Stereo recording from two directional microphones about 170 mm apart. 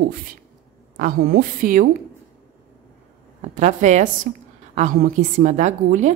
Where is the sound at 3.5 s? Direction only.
45° right (ahead or behind).